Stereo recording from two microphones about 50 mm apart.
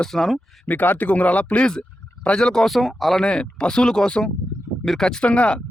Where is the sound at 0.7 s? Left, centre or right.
Left; by 2.6 s centre.